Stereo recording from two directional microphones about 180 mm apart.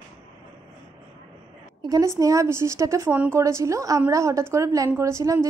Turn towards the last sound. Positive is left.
turn(degrees=-15)  # may be behind; listen again after turning